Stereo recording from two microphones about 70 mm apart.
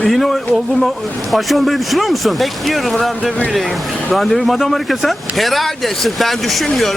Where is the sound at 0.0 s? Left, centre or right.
Centre.